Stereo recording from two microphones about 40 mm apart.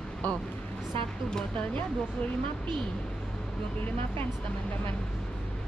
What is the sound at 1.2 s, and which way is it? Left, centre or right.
Speech, left.